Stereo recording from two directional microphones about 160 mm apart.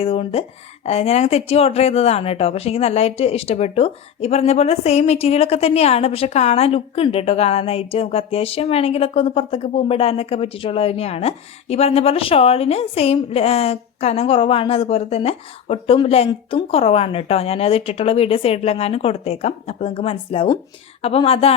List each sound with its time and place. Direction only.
0.0 s speech: 35° left (ahead or behind)